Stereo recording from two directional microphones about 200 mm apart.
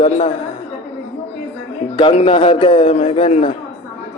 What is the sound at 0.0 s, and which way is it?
Speech, 30° left (ahead or behind).